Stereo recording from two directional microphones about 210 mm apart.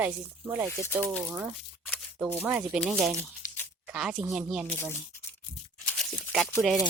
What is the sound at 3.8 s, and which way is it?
Speech, 5° right (ahead or behind).